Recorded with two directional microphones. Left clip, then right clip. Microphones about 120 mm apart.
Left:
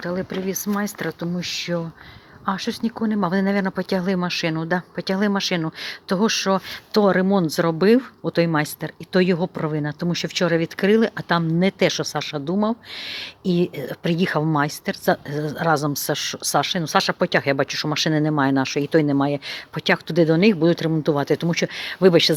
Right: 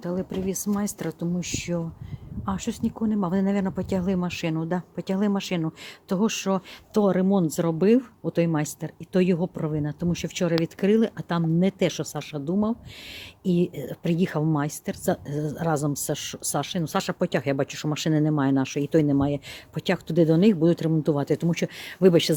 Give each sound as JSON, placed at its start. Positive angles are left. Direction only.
{"t": 0.4, "sound": "speech", "side_deg": -40}